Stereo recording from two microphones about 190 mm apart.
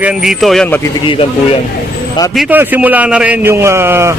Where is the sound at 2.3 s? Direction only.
10° right (ahead or behind).